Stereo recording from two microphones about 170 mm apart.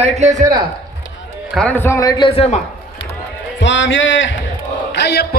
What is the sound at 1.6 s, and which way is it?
A man's voice, 10° left (ahead or behind).